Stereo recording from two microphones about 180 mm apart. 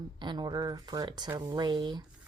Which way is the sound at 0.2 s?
25° right (ahead or behind).